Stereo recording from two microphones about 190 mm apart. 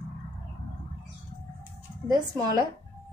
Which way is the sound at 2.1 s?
20° right (ahead or behind).